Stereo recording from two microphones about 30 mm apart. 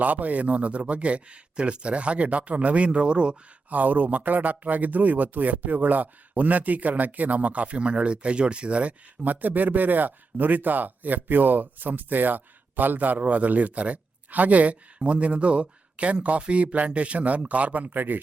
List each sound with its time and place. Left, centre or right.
0.0 s speech: right
3.7 s speech: right
9.2 s speech: right